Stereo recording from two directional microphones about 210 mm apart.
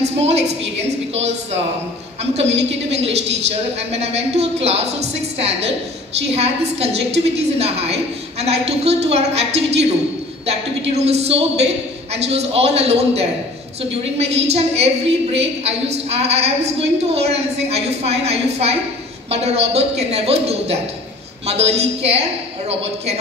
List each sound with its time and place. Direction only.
0.0 s a sound: 30° right (ahead or behind)
3.1 s a woman's voice: 30° right (ahead or behind)
10.9 s a woman's voice: 30° right (ahead or behind)